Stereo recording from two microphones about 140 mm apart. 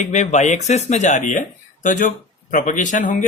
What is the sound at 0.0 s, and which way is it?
Speech, 55° left (ahead or behind).